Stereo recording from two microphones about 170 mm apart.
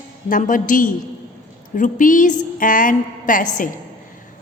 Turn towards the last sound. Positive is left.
turn(degrees=50)  # may be behind; listen again after turning